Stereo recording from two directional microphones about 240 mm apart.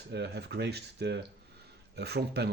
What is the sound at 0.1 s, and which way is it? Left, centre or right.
Speech, right.